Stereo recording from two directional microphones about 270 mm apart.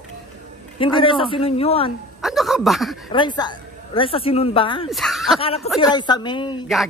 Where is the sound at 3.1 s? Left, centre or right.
Centre.